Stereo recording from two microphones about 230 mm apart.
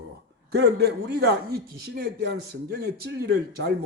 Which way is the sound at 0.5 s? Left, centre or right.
Right.